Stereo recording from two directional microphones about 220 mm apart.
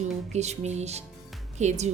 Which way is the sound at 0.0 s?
30° right (ahead or behind).